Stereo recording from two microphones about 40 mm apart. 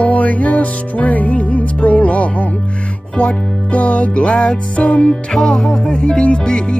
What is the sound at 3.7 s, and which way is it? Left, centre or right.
Music, left.